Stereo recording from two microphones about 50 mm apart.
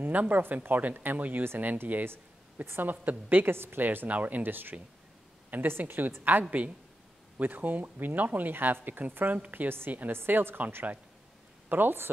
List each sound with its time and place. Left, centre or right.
0.0 s speech: right
2.0 s a woman's voice: right
3.5 s speech: right